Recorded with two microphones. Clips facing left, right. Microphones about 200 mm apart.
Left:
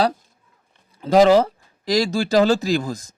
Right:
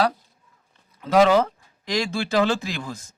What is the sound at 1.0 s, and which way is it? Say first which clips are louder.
A man's voice: left 4 dB; 35° left (ahead or behind).